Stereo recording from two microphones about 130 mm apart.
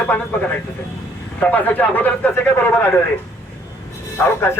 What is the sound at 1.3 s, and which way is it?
A man's voice, 15° left (ahead or behind).